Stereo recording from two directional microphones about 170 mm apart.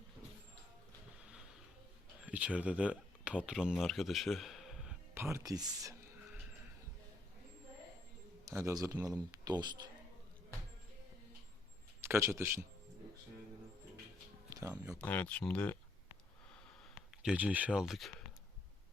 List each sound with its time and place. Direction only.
1.2 s music: 5° right (ahead or behind)
2.2 s speech: 10° right (ahead or behind)
5.1 s a man's voice: 15° right (ahead or behind)
8.4 s a man's voice: 20° right (ahead or behind)
12.0 s speech: 15° right (ahead or behind)
14.9 s speech: 10° left (ahead or behind)
17.2 s speech: 10° right (ahead or behind)